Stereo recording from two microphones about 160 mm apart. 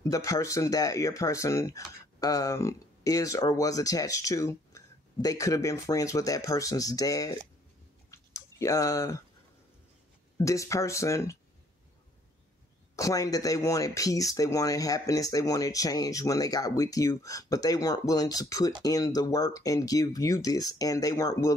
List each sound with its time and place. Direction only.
0.0 s speech: 20° left (ahead or behind)
8.1 s chewing: 20° left (ahead or behind)
10.3 s speech: 20° left (ahead or behind)
12.9 s speech: 20° left (ahead or behind)